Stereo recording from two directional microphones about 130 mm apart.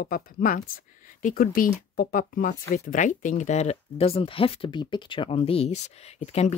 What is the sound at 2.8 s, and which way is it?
Speech, 80° left.